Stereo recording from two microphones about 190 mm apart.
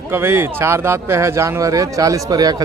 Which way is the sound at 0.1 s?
10° right (ahead or behind).